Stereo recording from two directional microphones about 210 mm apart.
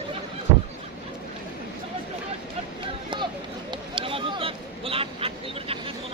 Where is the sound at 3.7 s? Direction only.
25° right (ahead or behind).